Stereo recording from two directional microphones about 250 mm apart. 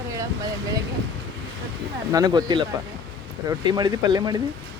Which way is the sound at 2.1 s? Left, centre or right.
Centre.